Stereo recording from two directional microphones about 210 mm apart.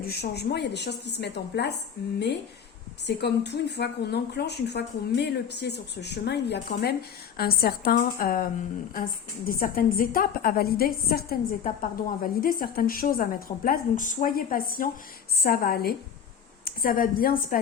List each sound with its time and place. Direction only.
0.0 s a woman's voice: 50° left (ahead or behind)